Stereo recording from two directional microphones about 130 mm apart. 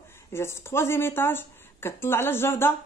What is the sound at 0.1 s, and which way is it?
A woman's voice, 20° left (ahead or behind).